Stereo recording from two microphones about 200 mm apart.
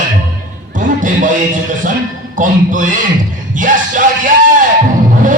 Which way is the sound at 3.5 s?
40° right (ahead or behind).